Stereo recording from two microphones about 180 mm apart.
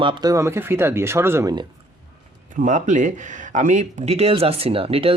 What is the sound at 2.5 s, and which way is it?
Speech, 45° right (ahead or behind).